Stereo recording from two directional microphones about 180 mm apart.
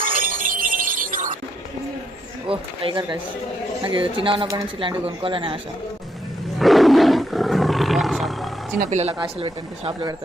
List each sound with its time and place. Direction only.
0.0 s music: 50° right (ahead or behind)
2.5 s speech: 25° right (ahead or behind)
6.6 s roar: centre (ahead or behind)
8.8 s speech: 40° right (ahead or behind)
9.1 s speech: 30° right (ahead or behind)